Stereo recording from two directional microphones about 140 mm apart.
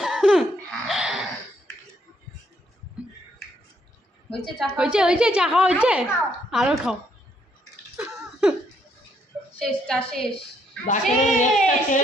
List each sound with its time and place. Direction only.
0.0 s laughter: centre (ahead or behind)
4.3 s a woman's voice: 5° right (ahead or behind)
8.0 s a sound: 5° right (ahead or behind)
9.6 s a woman's voice: 5° left (ahead or behind)
10.9 s speech: 60° left (ahead or behind)